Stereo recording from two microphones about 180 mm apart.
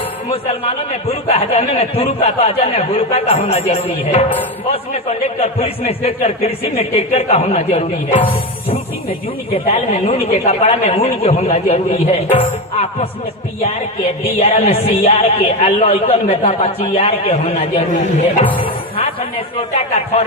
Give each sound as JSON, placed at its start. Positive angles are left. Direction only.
{"t": 0.3, "sound": "speech", "side_deg": 35}
{"t": 9.6, "sound": "speech", "side_deg": 35}
{"t": 14.3, "sound": "speech", "side_deg": 35}